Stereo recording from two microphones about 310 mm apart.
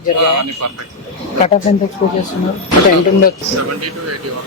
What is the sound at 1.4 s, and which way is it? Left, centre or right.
Speech, centre.